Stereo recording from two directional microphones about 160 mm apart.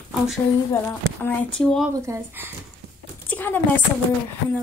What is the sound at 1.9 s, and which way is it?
Speech, 20° right (ahead or behind).